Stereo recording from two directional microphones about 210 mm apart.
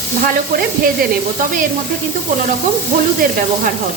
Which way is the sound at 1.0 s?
45° right (ahead or behind).